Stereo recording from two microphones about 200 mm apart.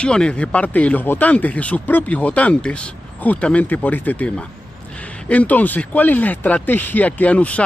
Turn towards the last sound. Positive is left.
turn(degrees=5)  # may be behind; listen again after turning